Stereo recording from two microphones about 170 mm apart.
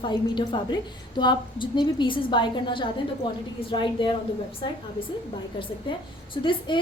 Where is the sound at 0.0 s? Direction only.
25° left (ahead or behind).